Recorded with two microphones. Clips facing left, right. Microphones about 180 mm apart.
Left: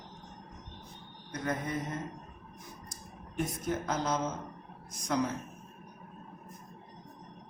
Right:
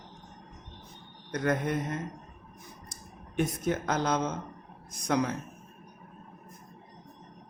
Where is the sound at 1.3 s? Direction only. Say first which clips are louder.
Right 6 dB; 70° right (ahead or behind).